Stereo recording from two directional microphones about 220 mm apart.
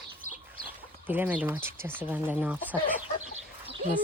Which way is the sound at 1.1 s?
10° right (ahead or behind).